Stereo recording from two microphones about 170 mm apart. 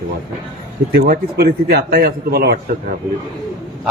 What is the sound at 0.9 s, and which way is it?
A man's voice, 65° right (ahead or behind).